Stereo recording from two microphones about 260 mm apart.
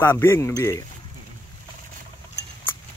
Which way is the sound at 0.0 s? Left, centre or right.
Centre.